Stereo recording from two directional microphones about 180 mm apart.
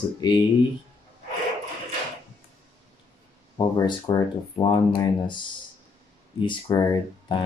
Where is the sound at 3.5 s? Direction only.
20° left (ahead or behind).